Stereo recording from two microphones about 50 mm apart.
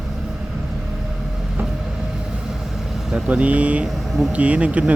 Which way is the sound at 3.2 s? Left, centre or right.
Right.